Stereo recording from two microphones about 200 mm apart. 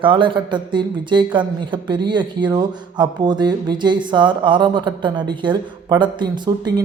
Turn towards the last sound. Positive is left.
turn(degrees=-20)  # may be behind; listen again after turning